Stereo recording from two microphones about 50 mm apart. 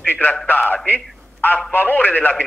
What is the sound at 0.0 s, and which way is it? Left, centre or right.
Speech, left.